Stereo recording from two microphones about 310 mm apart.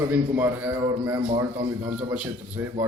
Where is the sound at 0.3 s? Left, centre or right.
Centre.